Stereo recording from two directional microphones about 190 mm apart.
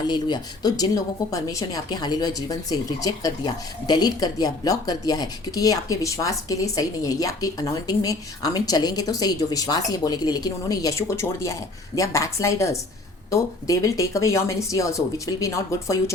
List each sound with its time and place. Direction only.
0.1 s speech: 20° left (ahead or behind)